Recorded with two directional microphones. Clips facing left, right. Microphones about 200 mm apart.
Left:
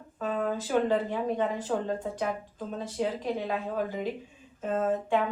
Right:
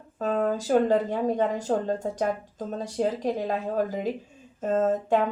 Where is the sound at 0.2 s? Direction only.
40° right (ahead or behind).